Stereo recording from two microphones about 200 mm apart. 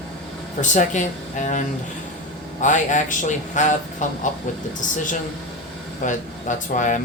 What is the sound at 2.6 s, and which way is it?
Speech, 40° left (ahead or behind).